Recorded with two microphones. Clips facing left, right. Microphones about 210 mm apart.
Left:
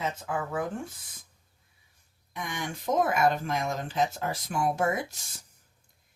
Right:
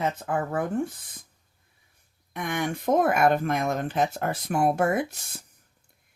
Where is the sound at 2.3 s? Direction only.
60° right (ahead or behind).